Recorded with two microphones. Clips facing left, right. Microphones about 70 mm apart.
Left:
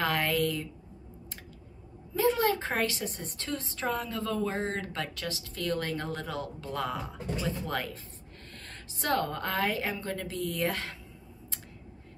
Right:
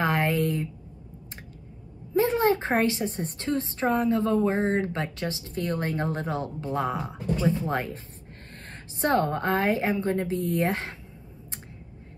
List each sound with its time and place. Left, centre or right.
0.0 s a woman's voice: right
2.1 s a woman's voice: right
9.0 s a woman's voice: right